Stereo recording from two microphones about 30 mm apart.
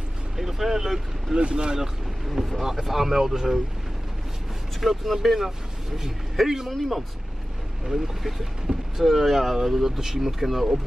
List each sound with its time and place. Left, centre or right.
0.4 s speech: centre
1.3 s speech: right
2.2 s speech: centre
4.7 s speech: centre
5.4 s speech: centre
7.8 s speech: centre